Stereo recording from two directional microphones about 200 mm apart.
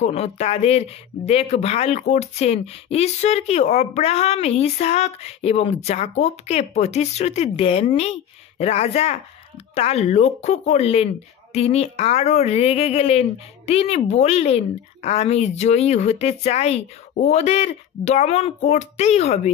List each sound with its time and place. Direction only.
0.0 s speech: 30° left (ahead or behind)